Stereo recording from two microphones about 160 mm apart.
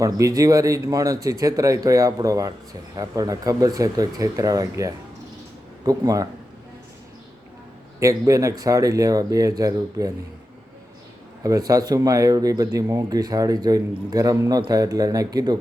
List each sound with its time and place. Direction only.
0.0 s speech: 20° right (ahead or behind)
7.9 s speech: 20° right (ahead or behind)
11.4 s speech: 20° right (ahead or behind)